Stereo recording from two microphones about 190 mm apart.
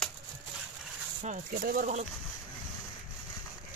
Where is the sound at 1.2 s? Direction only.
40° right (ahead or behind).